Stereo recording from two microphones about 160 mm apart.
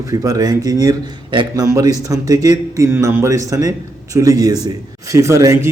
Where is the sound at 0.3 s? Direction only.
25° right (ahead or behind).